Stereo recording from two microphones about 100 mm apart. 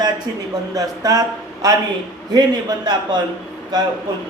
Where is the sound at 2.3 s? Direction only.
45° right (ahead or behind).